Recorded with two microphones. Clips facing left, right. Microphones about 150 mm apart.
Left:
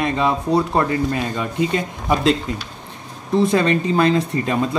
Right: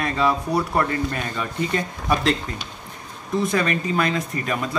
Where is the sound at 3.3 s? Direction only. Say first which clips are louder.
Left 6 dB; 30° left (ahead or behind).